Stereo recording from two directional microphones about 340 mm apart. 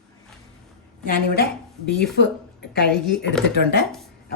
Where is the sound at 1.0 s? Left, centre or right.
Left.